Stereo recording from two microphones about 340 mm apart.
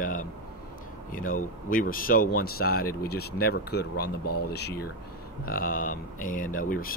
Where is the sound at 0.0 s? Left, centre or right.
Left.